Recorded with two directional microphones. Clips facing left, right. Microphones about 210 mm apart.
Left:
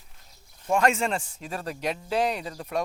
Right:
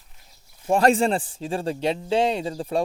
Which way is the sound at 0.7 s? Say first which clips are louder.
Right 5 dB; 35° right (ahead or behind).